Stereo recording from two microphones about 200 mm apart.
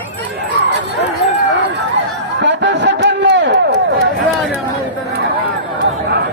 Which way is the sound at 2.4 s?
60° right (ahead or behind).